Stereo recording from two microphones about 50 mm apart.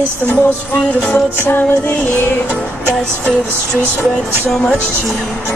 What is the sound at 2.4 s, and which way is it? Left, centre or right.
Music, left.